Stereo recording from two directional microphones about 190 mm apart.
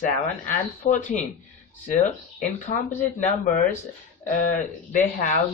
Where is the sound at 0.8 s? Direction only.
40° left (ahead or behind).